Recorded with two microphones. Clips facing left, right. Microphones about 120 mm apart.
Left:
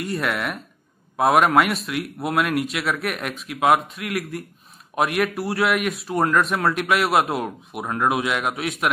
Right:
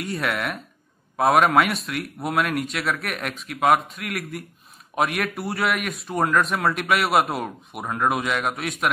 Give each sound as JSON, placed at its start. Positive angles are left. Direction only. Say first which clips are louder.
{"t": 0.0, "sound": "speech", "louder": "left 1 dB", "side_deg": 0}